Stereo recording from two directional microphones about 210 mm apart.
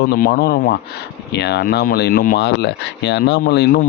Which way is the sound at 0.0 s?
50° left (ahead or behind).